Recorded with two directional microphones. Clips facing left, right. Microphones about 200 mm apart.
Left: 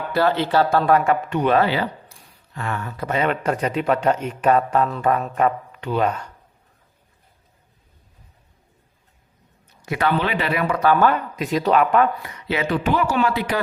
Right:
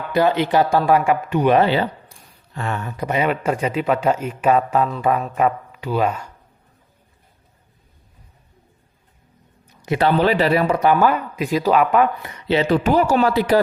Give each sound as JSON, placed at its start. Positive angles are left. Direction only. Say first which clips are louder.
{"t": 0.1, "sound": "speech", "louder": "right 2 dB", "side_deg": -15}
{"t": 1.6, "sound": "speech", "louder": "right 3 dB", "side_deg": -25}
{"t": 9.8, "sound": "a man's voice", "louder": "right 4 dB", "side_deg": -25}
{"t": 10.2, "sound": "speech", "louder": "right 6 dB", "side_deg": -40}
{"t": 10.8, "sound": "speech", "louder": "right 1 dB", "side_deg": -15}
{"t": 12.2, "sound": "speech", "louder": "right 5 dB", "side_deg": -30}